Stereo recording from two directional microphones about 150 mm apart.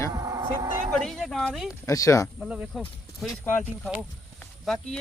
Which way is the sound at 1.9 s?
20° left (ahead or behind).